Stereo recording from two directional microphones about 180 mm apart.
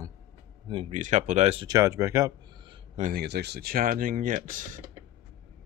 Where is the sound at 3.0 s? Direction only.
60° right (ahead or behind).